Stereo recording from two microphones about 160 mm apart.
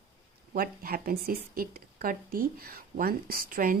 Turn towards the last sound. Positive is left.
turn(degrees=-60)  # may be behind; listen again after turning